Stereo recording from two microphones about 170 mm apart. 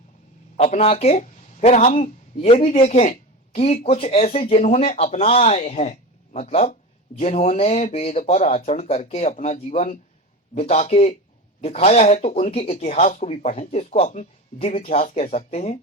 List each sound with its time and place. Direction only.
0.5 s speech: 40° left (ahead or behind)